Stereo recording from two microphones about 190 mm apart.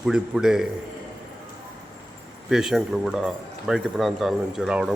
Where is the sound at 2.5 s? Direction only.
Centre (ahead or behind).